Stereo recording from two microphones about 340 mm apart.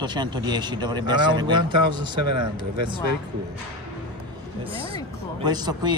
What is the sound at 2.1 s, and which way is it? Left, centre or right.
Speech, right.